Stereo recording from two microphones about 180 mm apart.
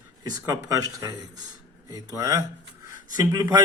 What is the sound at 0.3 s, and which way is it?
Speech, 20° right (ahead or behind).